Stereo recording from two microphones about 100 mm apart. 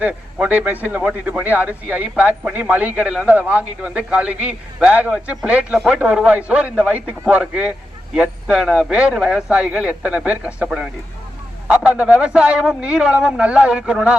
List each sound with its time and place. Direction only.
0.0 s speech: 15° right (ahead or behind)